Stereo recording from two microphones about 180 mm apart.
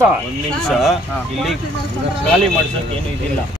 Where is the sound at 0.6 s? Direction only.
Centre (ahead or behind).